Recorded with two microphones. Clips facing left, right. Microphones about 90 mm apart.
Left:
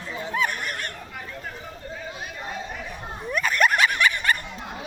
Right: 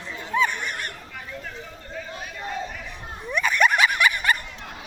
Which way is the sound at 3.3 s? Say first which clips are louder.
Right 1 dB; centre (ahead or behind).